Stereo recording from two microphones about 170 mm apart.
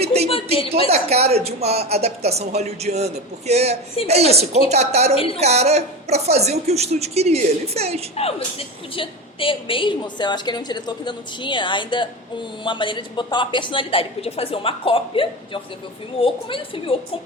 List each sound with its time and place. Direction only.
0.0 s speech: 40° right (ahead or behind)
5.1 s a woman's voice: 35° left (ahead or behind)
5.4 s speech: 40° right (ahead or behind)
8.1 s a woman's voice: 35° left (ahead or behind)